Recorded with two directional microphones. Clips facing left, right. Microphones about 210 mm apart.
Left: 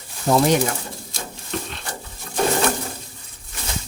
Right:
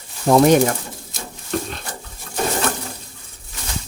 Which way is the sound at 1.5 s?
40° right (ahead or behind).